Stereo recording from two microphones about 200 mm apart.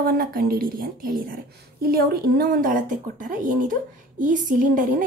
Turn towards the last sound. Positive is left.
turn(degrees=-40)  # may be behind; listen again after turning